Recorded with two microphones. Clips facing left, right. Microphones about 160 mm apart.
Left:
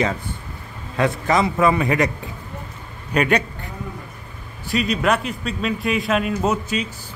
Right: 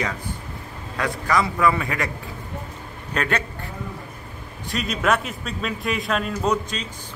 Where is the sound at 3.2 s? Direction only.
15° left (ahead or behind).